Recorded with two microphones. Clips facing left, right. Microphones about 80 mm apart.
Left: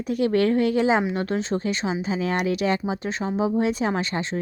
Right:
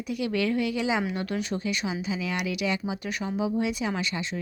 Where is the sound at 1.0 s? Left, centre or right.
Left.